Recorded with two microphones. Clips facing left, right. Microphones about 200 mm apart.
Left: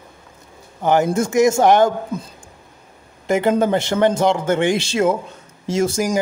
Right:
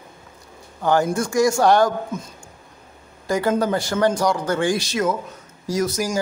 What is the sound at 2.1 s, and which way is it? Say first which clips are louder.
Speech: left 3 dB; 30° left (ahead or behind).